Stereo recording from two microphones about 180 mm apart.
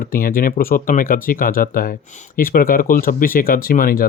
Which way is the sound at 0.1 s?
55° left (ahead or behind).